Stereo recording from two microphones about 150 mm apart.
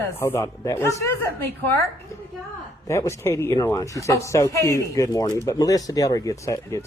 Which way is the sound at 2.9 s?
20° left (ahead or behind).